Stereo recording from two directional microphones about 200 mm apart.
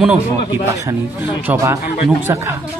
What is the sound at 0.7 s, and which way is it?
A man's voice, 15° right (ahead or behind).